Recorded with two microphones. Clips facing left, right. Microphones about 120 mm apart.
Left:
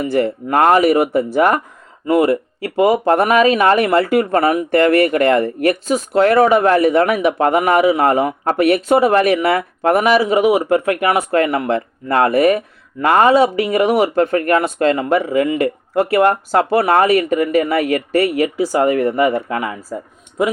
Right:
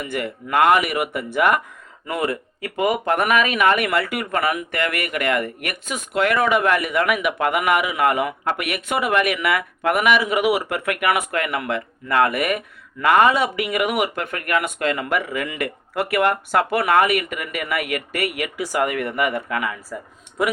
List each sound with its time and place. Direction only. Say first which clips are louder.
0.0 s speech: left 10 dB; 30° left (ahead or behind)